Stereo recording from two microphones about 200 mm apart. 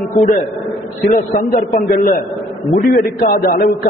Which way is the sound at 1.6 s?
45° left (ahead or behind).